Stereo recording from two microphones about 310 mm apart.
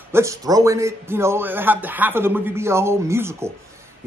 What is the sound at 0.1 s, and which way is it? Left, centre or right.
Speech, centre.